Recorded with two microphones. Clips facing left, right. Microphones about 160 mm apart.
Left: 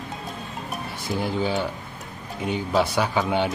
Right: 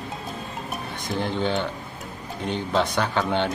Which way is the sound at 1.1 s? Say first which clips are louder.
Even; 10° left (ahead or behind).